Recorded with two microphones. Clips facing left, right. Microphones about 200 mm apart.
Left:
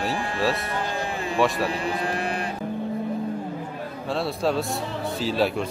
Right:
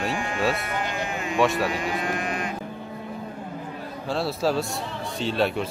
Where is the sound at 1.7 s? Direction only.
35° left (ahead or behind).